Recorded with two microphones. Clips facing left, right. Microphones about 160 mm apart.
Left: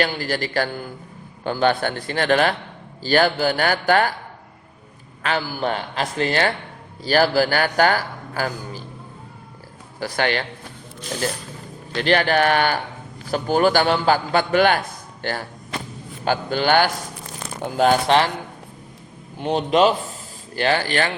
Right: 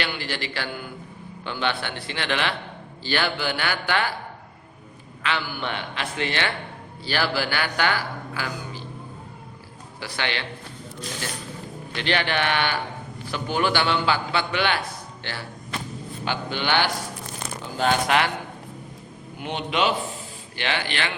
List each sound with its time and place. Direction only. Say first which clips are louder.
0.0 s a man's voice: left 7 dB; 40° left (ahead or behind)
5.2 s a man's voice: left 5 dB; 40° left (ahead or behind)
10.0 s a man's voice: left 7 dB; 45° left (ahead or behind)
11.9 s a man's voice: left 7 dB; 40° left (ahead or behind)
19.4 s a man's voice: left 8 dB; 35° left (ahead or behind)